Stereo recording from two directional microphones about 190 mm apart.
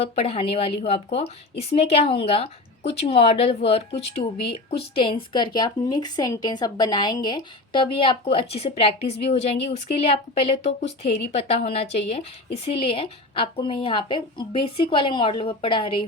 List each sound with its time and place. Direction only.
0.0 s a woman's voice: 30° left (ahead or behind)